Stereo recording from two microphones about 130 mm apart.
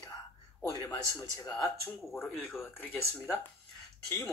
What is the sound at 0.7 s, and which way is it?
Speech, 30° left (ahead or behind).